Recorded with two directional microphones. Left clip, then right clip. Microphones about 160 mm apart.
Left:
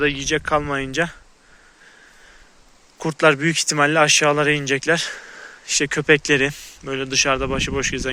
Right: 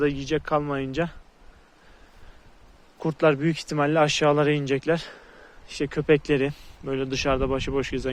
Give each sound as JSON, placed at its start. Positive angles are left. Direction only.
{"t": 0.0, "sound": "speech", "side_deg": 5}
{"t": 3.0, "sound": "speech", "side_deg": 5}
{"t": 5.2, "sound": "a sound", "side_deg": 25}
{"t": 5.7, "sound": "speech", "side_deg": 10}